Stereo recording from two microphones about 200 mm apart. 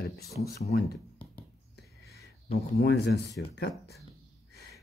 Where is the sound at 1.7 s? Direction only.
50° left (ahead or behind).